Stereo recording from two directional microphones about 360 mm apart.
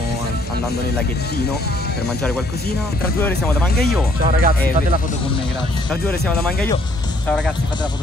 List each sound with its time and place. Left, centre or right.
4.2 s speech: right
5.9 s speech: centre